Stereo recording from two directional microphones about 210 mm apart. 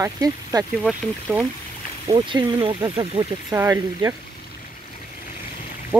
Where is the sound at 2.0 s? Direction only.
20° right (ahead or behind).